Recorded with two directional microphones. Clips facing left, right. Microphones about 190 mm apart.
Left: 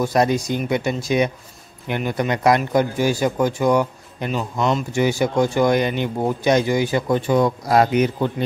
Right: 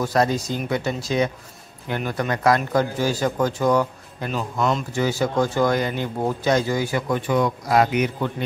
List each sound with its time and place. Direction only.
0.0 s speech: 15° left (ahead or behind)
4.3 s speech: centre (ahead or behind)
4.9 s speech: 15° left (ahead or behind); by 8.3 s 30° left (ahead or behind)